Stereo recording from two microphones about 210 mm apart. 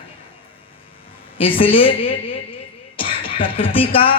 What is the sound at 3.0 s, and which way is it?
Speech, 25° left (ahead or behind).